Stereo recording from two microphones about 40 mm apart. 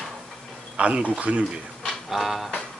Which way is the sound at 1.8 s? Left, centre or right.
Centre.